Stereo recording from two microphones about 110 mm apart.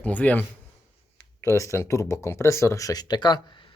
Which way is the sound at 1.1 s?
25° left (ahead or behind).